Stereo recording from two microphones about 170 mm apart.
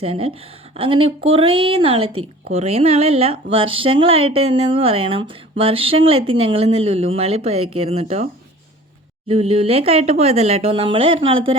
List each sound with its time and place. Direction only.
0.0 s speech: 35° right (ahead or behind)
9.3 s speech: 35° right (ahead or behind)